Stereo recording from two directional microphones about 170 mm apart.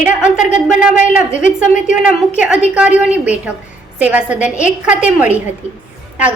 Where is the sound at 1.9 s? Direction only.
10° right (ahead or behind).